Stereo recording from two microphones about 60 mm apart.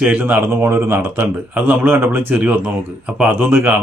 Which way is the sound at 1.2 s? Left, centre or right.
Right.